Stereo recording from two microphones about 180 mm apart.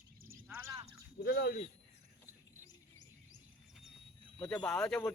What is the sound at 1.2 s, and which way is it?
Speech, 60° left (ahead or behind).